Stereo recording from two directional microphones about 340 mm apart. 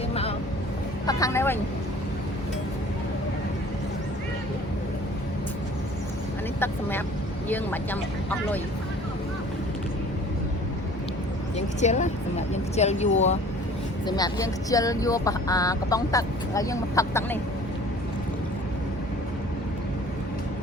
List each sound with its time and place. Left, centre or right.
0.1 s vehicle: centre
1.0 s speech: centre
7.5 s speech: centre
11.5 s speech: centre